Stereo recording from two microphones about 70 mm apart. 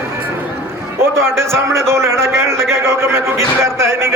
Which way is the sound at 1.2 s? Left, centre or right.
Right.